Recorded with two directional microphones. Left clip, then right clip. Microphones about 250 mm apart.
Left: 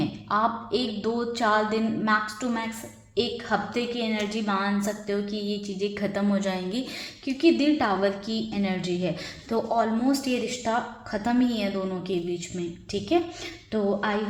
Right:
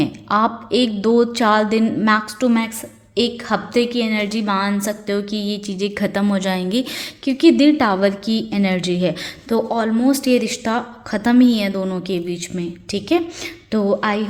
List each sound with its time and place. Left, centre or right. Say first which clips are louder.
0.0 s a woman's voice: right 7 dB; right